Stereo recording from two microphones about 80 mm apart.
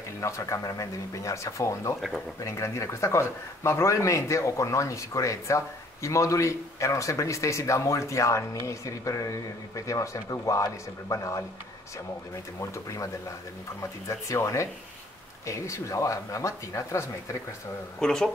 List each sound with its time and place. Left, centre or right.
0.2 s speech: left
2.0 s speech: centre
2.4 s speech: left
12.5 s speech: left
17.9 s speech: centre